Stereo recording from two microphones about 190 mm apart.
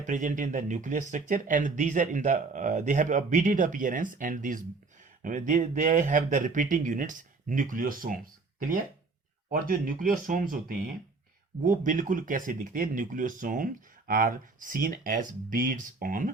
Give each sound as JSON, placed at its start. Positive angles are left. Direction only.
{"t": 0.0, "sound": "speech", "side_deg": -40}